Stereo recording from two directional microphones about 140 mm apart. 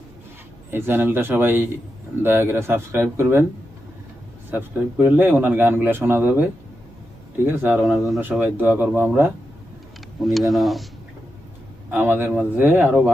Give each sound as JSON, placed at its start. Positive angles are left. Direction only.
{"t": 0.7, "sound": "speech", "side_deg": -15}
{"t": 4.5, "sound": "speech", "side_deg": -10}
{"t": 8.2, "sound": "speech", "side_deg": -15}
{"t": 10.2, "sound": "speech", "side_deg": 0}
{"t": 11.9, "sound": "speech", "side_deg": -15}